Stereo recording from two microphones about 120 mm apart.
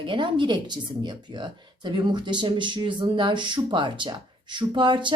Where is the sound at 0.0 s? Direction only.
45° right (ahead or behind).